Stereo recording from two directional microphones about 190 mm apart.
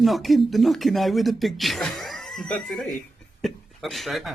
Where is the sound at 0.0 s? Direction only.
Centre (ahead or behind).